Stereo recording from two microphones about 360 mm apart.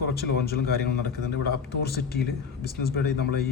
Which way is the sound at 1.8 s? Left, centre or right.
Left.